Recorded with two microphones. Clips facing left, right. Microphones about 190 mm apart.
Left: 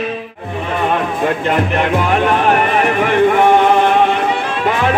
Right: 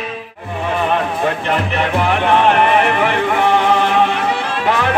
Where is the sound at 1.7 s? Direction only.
50° left (ahead or behind).